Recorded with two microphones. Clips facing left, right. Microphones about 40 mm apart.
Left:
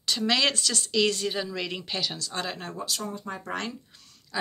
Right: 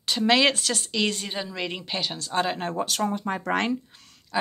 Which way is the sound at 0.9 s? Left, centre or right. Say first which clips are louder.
Left 4 dB; centre.